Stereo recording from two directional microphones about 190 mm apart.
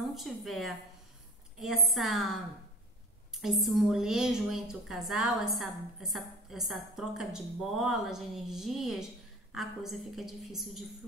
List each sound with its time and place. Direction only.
0.1 s a woman's voice: centre (ahead or behind)
3.3 s a woman's voice: centre (ahead or behind)